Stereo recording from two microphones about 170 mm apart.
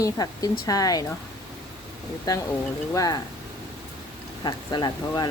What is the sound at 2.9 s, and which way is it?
Speech, 20° left (ahead or behind).